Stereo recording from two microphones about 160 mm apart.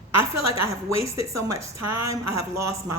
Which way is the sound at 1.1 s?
20° right (ahead or behind).